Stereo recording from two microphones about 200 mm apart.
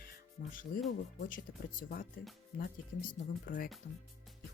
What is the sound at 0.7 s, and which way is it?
Speech, 45° left (ahead or behind).